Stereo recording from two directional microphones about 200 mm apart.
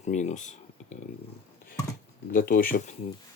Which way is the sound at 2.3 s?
45° left (ahead or behind).